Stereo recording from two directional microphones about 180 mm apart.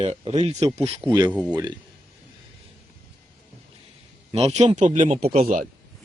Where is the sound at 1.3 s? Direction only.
5° right (ahead or behind).